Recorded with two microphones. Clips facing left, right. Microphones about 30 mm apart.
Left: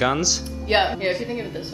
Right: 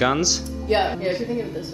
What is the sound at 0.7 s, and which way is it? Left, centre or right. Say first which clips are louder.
Speech: left 1 dB; left.